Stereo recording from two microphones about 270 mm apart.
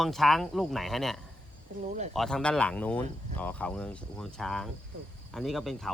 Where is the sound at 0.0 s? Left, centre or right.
Centre.